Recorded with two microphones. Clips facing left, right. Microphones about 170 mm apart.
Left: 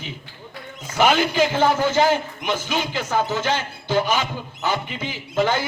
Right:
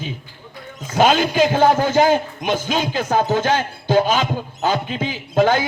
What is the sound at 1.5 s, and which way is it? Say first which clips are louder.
A man's voice: right 4 dB; 50° right (ahead or behind).